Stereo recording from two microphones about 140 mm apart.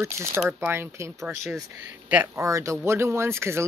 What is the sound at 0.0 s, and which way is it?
Speech, 20° right (ahead or behind).